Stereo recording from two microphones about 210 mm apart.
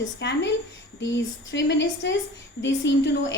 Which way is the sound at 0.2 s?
55° left (ahead or behind).